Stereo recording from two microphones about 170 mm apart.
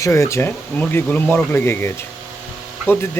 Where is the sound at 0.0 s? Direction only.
15° left (ahead or behind).